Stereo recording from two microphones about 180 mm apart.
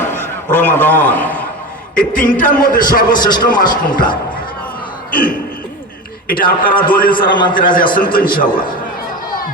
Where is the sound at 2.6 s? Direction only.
55° left (ahead or behind).